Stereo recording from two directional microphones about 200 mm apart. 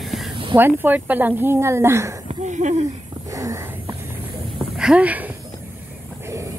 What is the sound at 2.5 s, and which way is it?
Speech, 35° right (ahead or behind).